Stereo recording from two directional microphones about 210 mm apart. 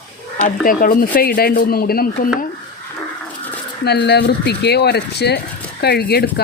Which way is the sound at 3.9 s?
50° left (ahead or behind).